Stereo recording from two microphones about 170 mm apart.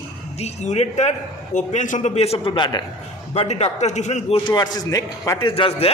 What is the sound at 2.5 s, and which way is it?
Speech, 25° left (ahead or behind).